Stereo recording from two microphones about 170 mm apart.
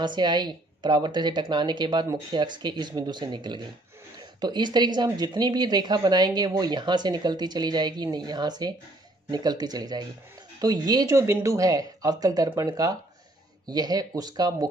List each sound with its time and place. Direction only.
0.0 s a woman's voice: 25° right (ahead or behind)